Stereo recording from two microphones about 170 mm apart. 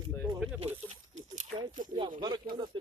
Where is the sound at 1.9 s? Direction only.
25° right (ahead or behind).